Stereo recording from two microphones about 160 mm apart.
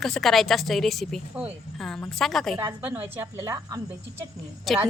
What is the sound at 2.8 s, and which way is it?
Speech, 15° right (ahead or behind).